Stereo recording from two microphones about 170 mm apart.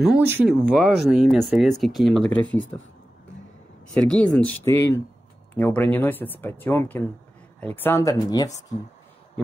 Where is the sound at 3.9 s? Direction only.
5° left (ahead or behind); by 8.5 s 20° left (ahead or behind).